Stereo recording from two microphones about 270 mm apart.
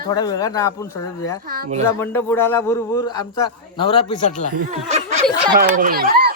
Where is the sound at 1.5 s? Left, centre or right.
Right.